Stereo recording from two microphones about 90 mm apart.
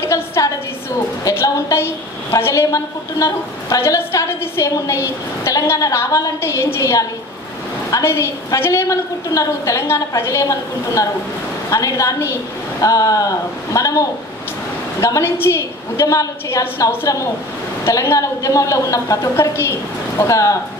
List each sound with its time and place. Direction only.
0.0 s a woman's voice: 30° left (ahead or behind)
15.0 s a woman's voice: 35° left (ahead or behind)